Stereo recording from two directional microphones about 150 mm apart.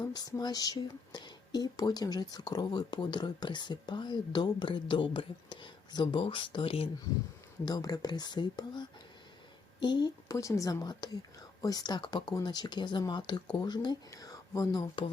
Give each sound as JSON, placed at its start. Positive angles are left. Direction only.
{"t": 0.0, "sound": "speech", "side_deg": 25}
{"t": 7.6, "sound": "speech", "side_deg": 25}